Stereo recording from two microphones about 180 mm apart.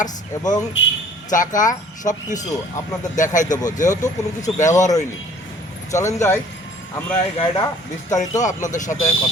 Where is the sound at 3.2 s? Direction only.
45° left (ahead or behind).